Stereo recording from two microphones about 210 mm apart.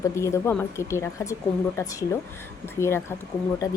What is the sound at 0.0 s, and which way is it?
Speech, 15° left (ahead or behind).